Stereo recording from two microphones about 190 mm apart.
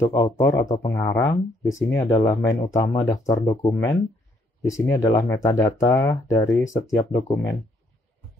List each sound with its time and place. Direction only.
0.0 s speech: 20° left (ahead or behind)